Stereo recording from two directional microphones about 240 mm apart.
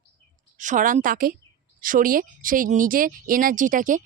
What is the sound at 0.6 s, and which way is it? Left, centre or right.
Speech, right.